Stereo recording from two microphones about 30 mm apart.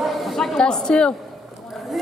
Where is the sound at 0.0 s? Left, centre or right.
Centre.